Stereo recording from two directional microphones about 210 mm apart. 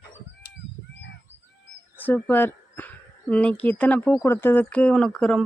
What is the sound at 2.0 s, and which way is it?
Speech, 10° left (ahead or behind).